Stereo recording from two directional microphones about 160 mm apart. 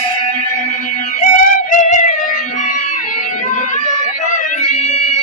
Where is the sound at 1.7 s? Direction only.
50° left (ahead or behind).